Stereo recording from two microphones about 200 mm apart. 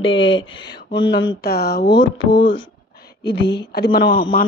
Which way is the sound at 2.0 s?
65° left (ahead or behind).